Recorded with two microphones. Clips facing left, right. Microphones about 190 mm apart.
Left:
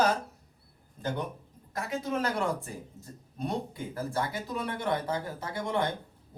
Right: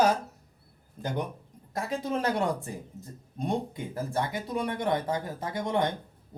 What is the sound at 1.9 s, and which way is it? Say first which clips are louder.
Speech: right 2 dB; 30° right (ahead or behind).